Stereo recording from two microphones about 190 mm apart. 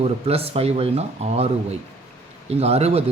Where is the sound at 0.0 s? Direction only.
30° right (ahead or behind).